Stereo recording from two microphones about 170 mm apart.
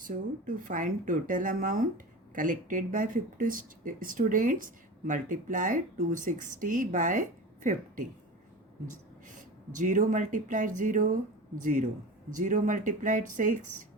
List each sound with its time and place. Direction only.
0.0 s speech: 50° right (ahead or behind)
9.3 s speech: 50° right (ahead or behind)